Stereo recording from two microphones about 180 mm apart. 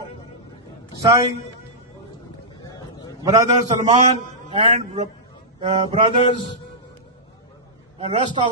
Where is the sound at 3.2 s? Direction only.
20° right (ahead or behind).